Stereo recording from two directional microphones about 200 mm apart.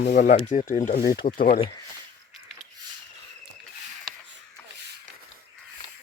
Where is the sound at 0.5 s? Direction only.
40° left (ahead or behind).